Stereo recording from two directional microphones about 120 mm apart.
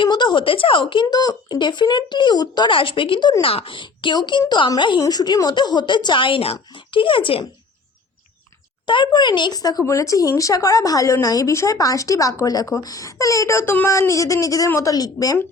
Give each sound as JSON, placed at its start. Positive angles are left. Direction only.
{"t": 0.0, "sound": "speech", "side_deg": 40}
{"t": 8.9, "sound": "speech", "side_deg": 40}